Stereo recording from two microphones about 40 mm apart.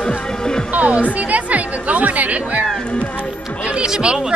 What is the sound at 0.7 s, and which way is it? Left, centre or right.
Music, right.